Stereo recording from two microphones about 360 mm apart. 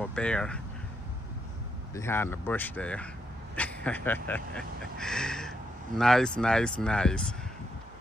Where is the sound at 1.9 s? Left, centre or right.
Centre.